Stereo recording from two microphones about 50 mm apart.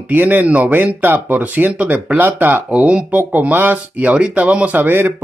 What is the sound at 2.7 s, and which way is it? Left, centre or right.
Speech, right.